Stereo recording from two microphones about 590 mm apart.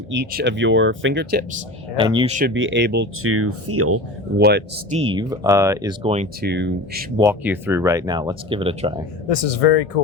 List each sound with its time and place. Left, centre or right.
0.1 s speech: centre
7.2 s speech: centre
9.3 s speech: left